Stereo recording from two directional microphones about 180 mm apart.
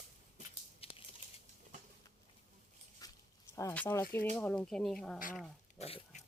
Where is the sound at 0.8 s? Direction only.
30° left (ahead or behind).